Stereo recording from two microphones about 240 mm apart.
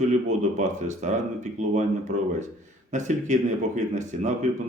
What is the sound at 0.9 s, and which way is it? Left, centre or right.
Speech, right.